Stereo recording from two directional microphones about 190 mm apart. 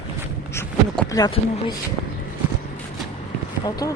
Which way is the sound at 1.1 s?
20° left (ahead or behind).